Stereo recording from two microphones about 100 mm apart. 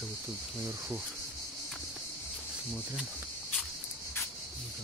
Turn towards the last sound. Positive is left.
turn(degrees=-5)  # may be behind; listen again after turning